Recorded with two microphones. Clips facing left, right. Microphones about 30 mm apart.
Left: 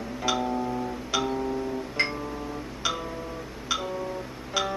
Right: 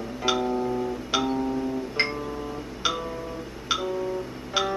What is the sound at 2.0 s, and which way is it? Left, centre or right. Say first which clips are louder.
Music: right 1 dB; centre.